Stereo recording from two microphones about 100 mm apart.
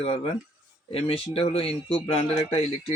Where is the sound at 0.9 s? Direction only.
75° left (ahead or behind).